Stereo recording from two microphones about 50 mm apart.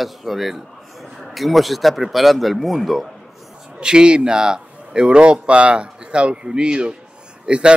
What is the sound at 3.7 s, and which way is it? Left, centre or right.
A man's voice, centre.